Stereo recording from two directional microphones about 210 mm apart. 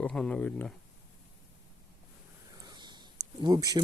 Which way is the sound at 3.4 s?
20° right (ahead or behind).